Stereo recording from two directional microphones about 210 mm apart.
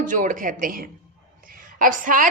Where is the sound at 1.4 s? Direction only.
40° right (ahead or behind).